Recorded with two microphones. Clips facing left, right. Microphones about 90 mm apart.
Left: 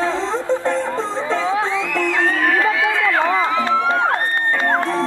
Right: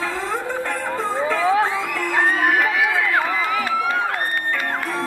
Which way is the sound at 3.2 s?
25° left (ahead or behind).